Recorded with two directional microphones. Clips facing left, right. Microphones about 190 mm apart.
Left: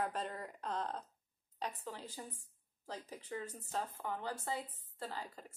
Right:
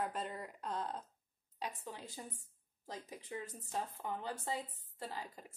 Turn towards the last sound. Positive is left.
turn(degrees=-15)  # may be behind; listen again after turning